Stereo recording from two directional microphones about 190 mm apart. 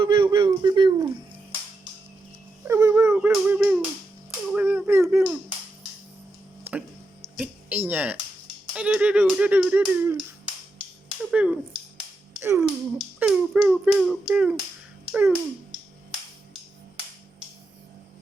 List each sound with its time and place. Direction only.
0.0 s a sound: 25° right (ahead or behind)
2.6 s a sound: 15° right (ahead or behind)
5.1 s finger snapping: 5° right (ahead or behind)
6.7 s music: 10° right (ahead or behind)
8.7 s speech: 5° right (ahead or behind)
11.3 s speech: 5° right (ahead or behind)
11.9 s finger snapping: 15° right (ahead or behind)
13.1 s a child's voice: 5° right (ahead or behind)